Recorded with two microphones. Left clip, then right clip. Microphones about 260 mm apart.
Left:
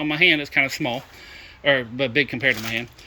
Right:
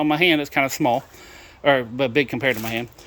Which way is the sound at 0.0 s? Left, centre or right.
Centre.